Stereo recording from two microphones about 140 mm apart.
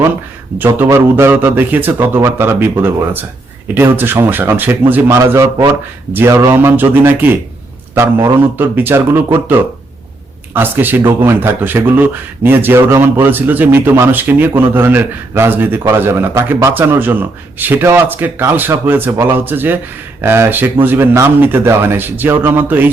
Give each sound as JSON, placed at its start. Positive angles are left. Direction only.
{"t": 0.6, "sound": "a man's voice", "side_deg": -15}